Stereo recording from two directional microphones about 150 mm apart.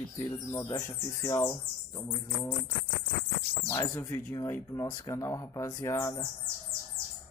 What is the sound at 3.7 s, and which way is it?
Speech, 20° left (ahead or behind).